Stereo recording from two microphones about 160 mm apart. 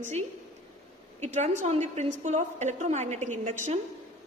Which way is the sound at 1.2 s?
45° right (ahead or behind).